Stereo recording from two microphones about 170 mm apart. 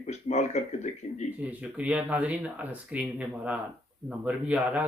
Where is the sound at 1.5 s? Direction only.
10° right (ahead or behind).